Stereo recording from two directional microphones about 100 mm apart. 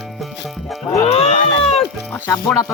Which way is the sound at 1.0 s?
90° left.